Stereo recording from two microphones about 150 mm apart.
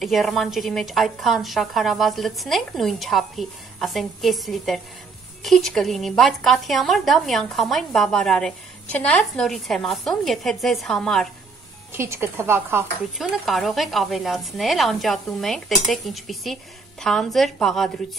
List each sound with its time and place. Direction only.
0.0 s a woman's voice: centre (ahead or behind)
11.9 s speech: 15° right (ahead or behind)
13.2 s a woman's voice: centre (ahead or behind)